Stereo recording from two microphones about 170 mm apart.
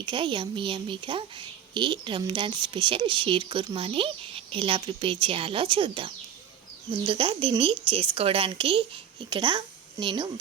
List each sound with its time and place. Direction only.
0.0 s a woman's voice: 30° right (ahead or behind)